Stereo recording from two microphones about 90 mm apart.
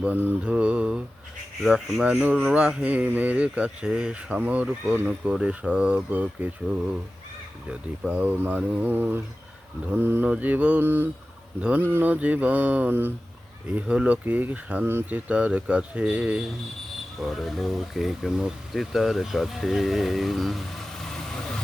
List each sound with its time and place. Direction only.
0.0 s speech: 20° right (ahead or behind)
7.7 s speech: 10° right (ahead or behind)
17.2 s speech: centre (ahead or behind)